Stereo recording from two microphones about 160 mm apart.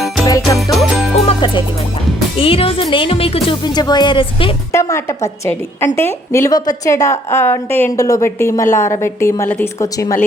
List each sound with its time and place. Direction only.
0.3 s music: 20° left (ahead or behind)
0.7 s music: centre (ahead or behind)
1.1 s music: 40° left (ahead or behind)
2.3 s speech: 35° left (ahead or behind)
4.7 s a woman's voice: 20° left (ahead or behind)